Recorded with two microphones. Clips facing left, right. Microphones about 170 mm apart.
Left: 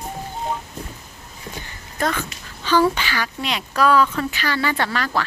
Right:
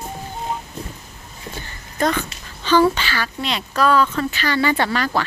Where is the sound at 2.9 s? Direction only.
15° left (ahead or behind).